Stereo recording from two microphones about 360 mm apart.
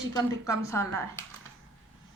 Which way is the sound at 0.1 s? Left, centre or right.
Centre.